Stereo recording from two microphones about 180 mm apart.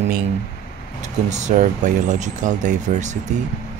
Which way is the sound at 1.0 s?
40° right (ahead or behind).